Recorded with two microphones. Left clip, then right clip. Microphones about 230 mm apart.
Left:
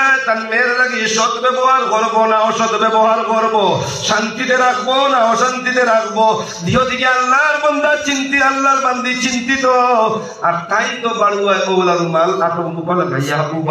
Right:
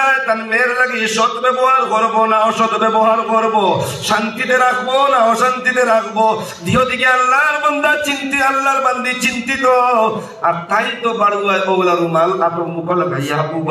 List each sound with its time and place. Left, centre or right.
1.1 s a man's voice: right